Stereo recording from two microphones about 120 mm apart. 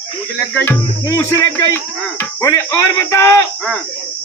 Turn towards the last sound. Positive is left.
turn(degrees=20)  # may be behind; listen again after turning